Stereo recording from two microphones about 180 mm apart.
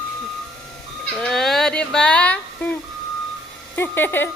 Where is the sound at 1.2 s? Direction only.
Centre (ahead or behind).